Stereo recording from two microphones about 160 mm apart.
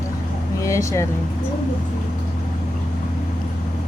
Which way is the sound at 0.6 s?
20° left (ahead or behind).